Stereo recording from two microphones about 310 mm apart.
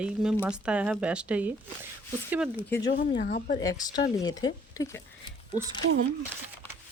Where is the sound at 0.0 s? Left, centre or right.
Centre.